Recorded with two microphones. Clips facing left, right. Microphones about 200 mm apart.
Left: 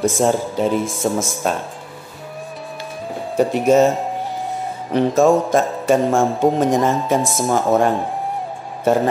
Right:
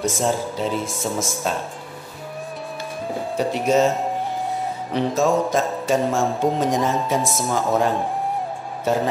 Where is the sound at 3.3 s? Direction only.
50° left (ahead or behind).